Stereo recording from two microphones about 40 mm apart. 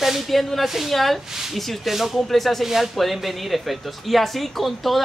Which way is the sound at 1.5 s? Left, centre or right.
Centre.